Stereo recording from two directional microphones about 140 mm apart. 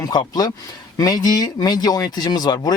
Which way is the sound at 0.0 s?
30° left (ahead or behind).